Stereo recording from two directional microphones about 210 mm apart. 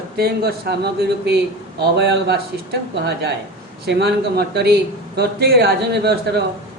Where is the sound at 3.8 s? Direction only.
50° right (ahead or behind).